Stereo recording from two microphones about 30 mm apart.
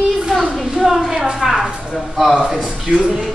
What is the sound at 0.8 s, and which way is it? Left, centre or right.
Speech, centre.